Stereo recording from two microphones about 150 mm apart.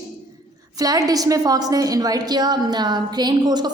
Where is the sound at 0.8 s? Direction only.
25° right (ahead or behind).